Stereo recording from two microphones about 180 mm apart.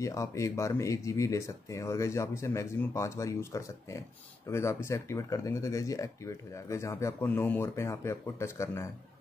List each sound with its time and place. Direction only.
0.0 s speech: 15° left (ahead or behind)